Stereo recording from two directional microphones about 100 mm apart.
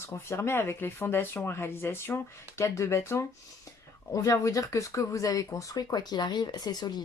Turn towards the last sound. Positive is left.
turn(degrees=45)  # may be behind; listen again after turning